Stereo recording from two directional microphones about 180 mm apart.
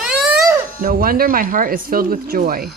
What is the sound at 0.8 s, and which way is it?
Speech, 50° right (ahead or behind).